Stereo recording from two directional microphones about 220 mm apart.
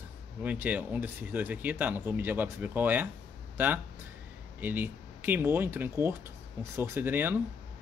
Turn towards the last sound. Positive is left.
turn(degrees=-10)  # may be behind; listen again after turning